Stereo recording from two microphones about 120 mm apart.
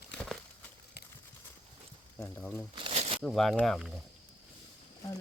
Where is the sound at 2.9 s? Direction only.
60° right (ahead or behind).